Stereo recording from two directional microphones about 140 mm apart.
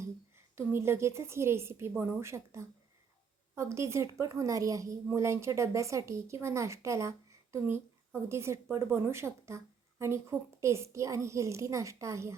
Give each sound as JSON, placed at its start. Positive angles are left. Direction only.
{"t": 0.5, "sound": "a woman's voice", "side_deg": -20}